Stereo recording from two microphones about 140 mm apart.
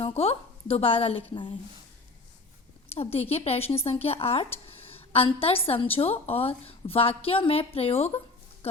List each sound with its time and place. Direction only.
0.0 s a woman's voice: 45° left (ahead or behind)
2.9 s a woman's voice: 45° left (ahead or behind)